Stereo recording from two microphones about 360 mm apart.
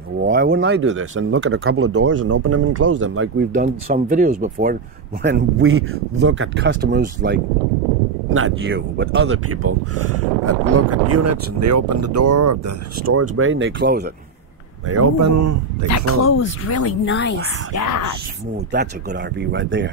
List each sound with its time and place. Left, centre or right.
0.2 s speech: right
3.5 s speech: right
5.2 s speech: right
14.9 s speech: right
15.9 s speech: left
19.4 s speech: right